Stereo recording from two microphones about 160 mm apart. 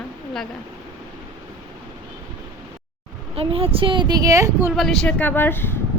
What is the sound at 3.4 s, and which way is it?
A woman's voice, 35° right (ahead or behind).